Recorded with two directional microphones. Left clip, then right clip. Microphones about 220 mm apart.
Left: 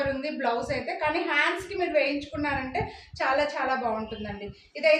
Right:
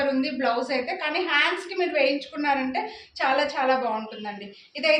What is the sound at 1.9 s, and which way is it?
Speech, 15° left (ahead or behind).